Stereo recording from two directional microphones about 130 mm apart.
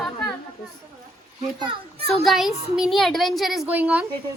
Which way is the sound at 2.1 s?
Centre (ahead or behind).